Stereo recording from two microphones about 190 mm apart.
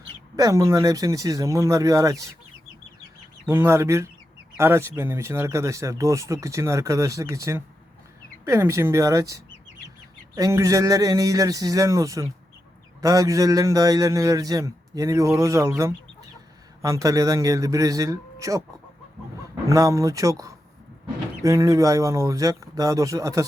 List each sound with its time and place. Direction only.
0.3 s speech: 15° right (ahead or behind)
3.5 s speech: 15° right (ahead or behind)
19.6 s speech: 15° right (ahead or behind)
21.4 s speech: 15° right (ahead or behind)